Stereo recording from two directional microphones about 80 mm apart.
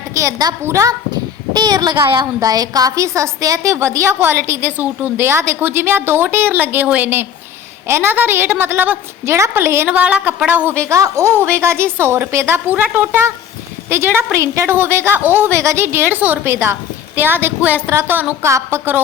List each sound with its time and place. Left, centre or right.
0.1 s a woman's voice: right
1.1 s a woman's voice: right
9.9 s a woman's voice: centre
10.8 s a woman's voice: right
18.4 s a woman's voice: right